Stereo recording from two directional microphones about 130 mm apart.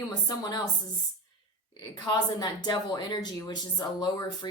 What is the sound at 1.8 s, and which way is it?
A woman's voice, 35° left (ahead or behind).